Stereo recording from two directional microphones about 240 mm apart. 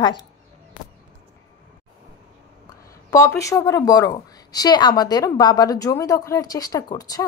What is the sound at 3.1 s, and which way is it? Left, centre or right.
A woman's voice, centre.